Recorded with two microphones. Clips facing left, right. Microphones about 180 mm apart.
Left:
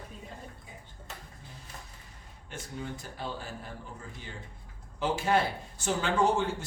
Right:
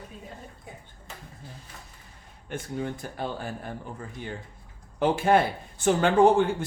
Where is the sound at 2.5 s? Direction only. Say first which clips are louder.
Right 7 dB; 55° right (ahead or behind).